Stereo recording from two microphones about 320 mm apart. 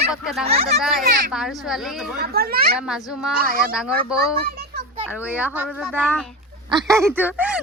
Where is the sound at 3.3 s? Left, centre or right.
Centre.